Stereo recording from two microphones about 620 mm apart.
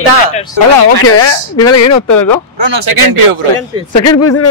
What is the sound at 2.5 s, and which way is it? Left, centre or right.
Speech, right.